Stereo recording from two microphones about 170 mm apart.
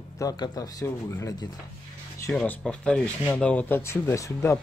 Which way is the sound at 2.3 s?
5° left (ahead or behind).